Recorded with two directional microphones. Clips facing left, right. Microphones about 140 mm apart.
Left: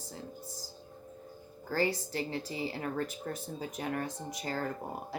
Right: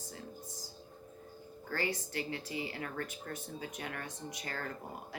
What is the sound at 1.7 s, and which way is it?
Speech, 35° left (ahead or behind).